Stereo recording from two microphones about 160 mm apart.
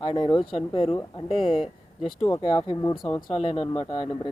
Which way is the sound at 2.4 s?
30° left (ahead or behind).